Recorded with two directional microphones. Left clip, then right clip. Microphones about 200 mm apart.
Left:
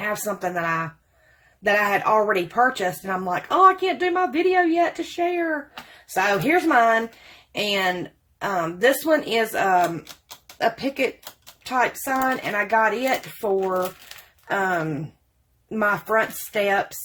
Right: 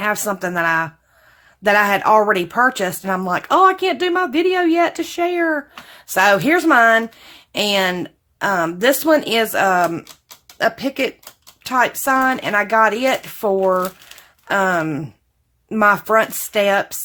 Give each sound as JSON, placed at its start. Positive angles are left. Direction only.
{"t": 0.0, "sound": "speech", "side_deg": -35}